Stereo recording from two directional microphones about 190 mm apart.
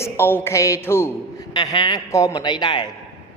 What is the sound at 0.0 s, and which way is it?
Speech, 10° left (ahead or behind).